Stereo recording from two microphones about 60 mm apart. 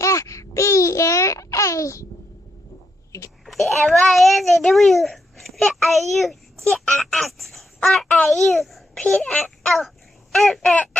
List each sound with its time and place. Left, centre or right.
0.0 s babbling: left
3.4 s a child's voice: centre